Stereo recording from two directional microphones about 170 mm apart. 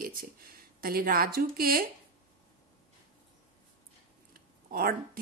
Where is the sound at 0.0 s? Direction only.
60° right (ahead or behind).